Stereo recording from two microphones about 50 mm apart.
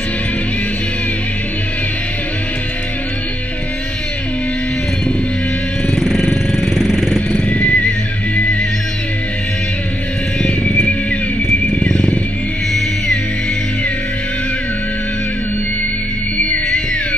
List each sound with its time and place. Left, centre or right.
5.9 s music: centre
6.7 s vehicle: centre
7.4 s music: left
11.9 s wild animals: left